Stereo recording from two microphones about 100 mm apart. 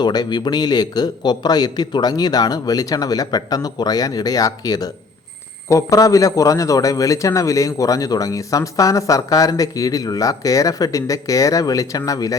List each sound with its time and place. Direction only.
0.0 s a man's voice: 45° left (ahead or behind)